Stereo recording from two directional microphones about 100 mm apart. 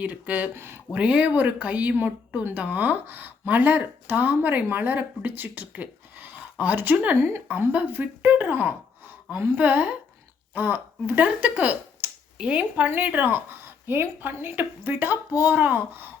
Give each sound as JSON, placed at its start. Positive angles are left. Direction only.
{"t": 0.0, "sound": "speech", "side_deg": -15}
{"t": 0.9, "sound": "speech", "side_deg": -15}